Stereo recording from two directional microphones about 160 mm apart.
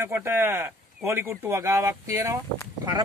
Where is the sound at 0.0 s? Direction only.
15° right (ahead or behind).